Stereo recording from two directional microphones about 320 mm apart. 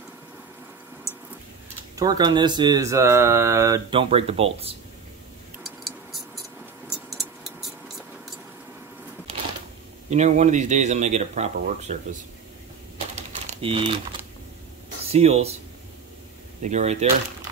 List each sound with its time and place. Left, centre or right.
2.0 s speech: centre
5.6 s tick-tock: centre
6.9 s a sound: centre
10.0 s speech: right
12.9 s typing: centre
15.0 s speech: centre
16.6 s speech: right